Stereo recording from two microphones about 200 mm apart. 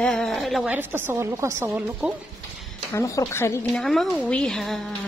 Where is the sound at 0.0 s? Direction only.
Centre (ahead or behind); by 1.9 s 15° right (ahead or behind).